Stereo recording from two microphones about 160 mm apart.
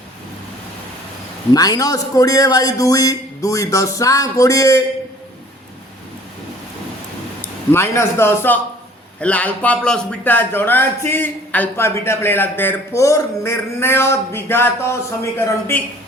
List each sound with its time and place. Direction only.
1.5 s a man's voice: 25° left (ahead or behind)
7.7 s a man's voice: 15° left (ahead or behind)